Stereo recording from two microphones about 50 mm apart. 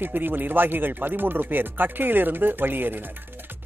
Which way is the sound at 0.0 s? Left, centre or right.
Right.